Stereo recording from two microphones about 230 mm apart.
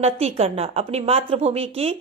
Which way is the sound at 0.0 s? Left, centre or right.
Right.